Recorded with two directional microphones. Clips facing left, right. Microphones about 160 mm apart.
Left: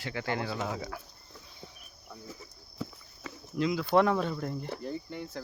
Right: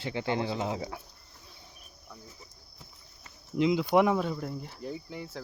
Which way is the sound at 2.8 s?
90° left.